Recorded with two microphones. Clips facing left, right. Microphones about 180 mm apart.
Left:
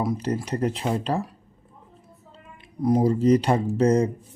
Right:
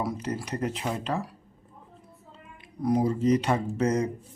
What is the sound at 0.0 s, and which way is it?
Speech, 25° left (ahead or behind).